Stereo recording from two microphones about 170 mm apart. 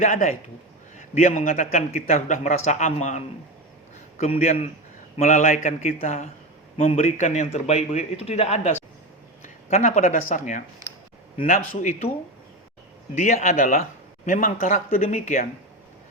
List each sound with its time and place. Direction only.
0.0 s a man's voice: 45° left (ahead or behind)
13.1 s a man's voice: 45° left (ahead or behind)